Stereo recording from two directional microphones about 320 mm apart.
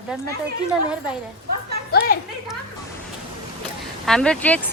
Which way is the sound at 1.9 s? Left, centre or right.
Left.